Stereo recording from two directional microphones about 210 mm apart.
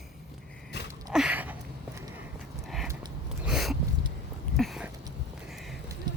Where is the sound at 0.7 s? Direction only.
50° left (ahead or behind).